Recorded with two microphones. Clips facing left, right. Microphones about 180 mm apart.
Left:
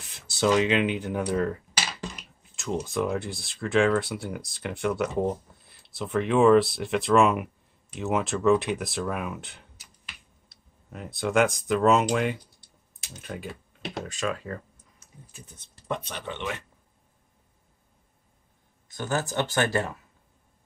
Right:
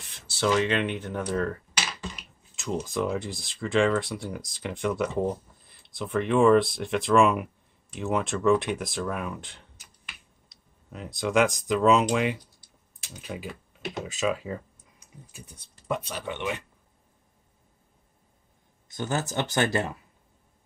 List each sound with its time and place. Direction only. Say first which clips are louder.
0.1 s speech: left 2 dB; 15° left (ahead or behind)
2.5 s speech: left 1 dB; centre (ahead or behind); by 16.6 s 15° right (ahead or behind)
18.9 s speech: left 1 dB; 20° right (ahead or behind)